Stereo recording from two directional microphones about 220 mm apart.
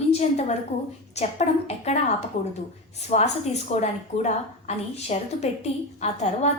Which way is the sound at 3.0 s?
30° left (ahead or behind).